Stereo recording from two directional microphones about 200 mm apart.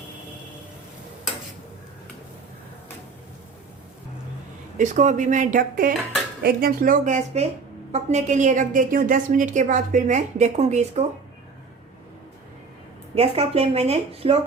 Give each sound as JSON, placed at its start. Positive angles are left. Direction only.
{"t": 4.8, "sound": "a woman's voice", "side_deg": -40}
{"t": 13.1, "sound": "a woman's voice", "side_deg": -30}